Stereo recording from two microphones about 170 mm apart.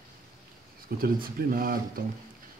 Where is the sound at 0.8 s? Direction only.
55° right (ahead or behind).